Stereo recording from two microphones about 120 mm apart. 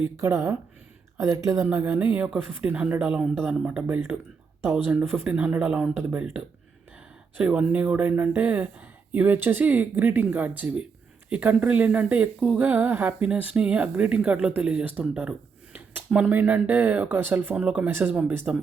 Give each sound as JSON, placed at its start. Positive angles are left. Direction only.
{"t": 0.2, "sound": "speech", "side_deg": -25}